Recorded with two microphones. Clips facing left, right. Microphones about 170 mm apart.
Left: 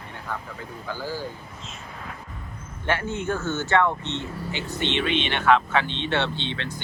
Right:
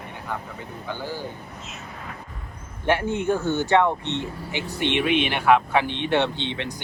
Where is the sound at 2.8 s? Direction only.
15° right (ahead or behind).